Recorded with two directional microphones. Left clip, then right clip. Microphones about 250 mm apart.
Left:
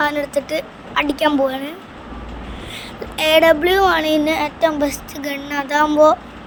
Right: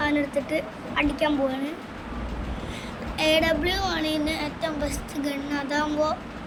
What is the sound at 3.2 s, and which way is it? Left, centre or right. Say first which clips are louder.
Speech: left 9 dB; centre.